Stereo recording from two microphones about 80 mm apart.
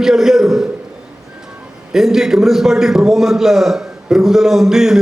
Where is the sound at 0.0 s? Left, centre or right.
Centre.